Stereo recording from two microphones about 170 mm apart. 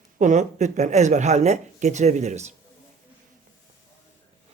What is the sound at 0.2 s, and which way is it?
Speech, 45° right (ahead or behind).